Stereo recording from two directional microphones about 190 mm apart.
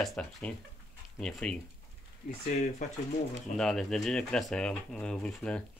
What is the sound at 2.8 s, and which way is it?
Speech, 40° left (ahead or behind).